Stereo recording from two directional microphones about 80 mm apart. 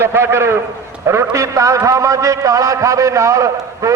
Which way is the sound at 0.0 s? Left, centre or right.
Right.